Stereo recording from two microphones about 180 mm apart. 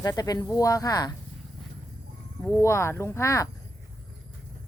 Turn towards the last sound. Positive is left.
turn(degrees=15)  # may be behind; listen again after turning